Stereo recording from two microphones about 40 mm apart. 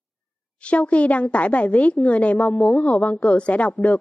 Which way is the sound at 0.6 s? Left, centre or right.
Left.